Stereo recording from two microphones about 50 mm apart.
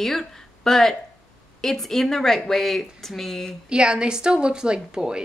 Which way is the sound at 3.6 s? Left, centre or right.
Centre.